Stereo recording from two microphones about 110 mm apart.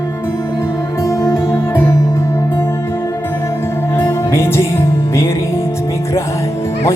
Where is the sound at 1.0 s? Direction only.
25° left (ahead or behind).